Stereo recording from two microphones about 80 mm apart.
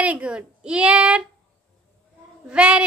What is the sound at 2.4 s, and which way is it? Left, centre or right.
Speech, centre.